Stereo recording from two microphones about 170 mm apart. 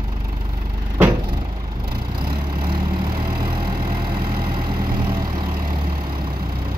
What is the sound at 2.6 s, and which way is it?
Vehicle, 30° right (ahead or behind).